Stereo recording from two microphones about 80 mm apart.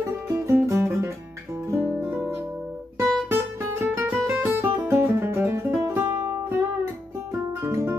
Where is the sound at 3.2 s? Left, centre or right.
Right.